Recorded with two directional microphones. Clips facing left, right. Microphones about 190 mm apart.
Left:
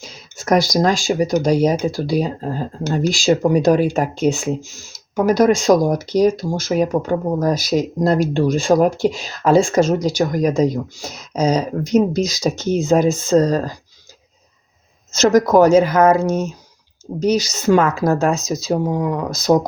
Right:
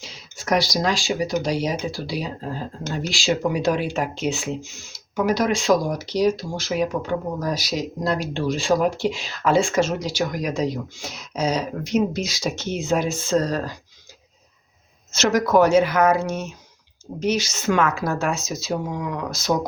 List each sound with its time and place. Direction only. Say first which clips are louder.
0.0 s speech: left 4 dB; 45° left (ahead or behind)
15.1 s speech: left 6 dB; 40° left (ahead or behind)